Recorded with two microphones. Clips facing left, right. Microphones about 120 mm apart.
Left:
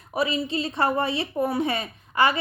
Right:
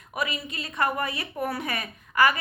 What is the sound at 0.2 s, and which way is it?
A woman's voice, 30° left (ahead or behind).